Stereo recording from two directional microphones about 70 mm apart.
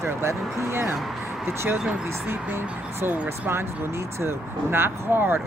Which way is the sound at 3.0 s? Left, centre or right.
Right.